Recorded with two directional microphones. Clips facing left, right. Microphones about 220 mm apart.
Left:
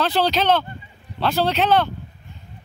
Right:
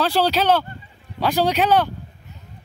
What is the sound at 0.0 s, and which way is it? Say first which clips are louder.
Speech: right 1 dB; 10° right (ahead or behind).